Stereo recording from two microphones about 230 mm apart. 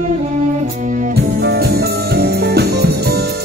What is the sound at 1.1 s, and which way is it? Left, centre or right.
Music, right.